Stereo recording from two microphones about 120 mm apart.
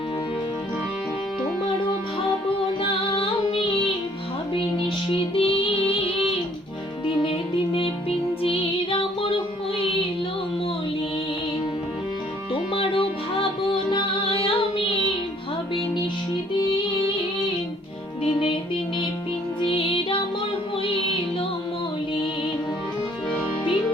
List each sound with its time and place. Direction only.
3.2 s music: 50° left (ahead or behind)
5.0 s music: 50° left (ahead or behind)
7.2 s music: 45° left (ahead or behind)
12.7 s music: 50° left (ahead or behind)
18.2 s music: 50° left (ahead or behind)
19.6 s music: 50° left (ahead or behind)